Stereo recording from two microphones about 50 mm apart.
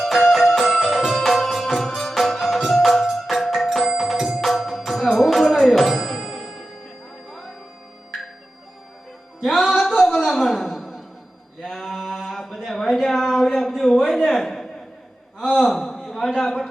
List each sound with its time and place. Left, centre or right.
0.0 s music: centre
9.4 s music: centre
11.6 s a sound: centre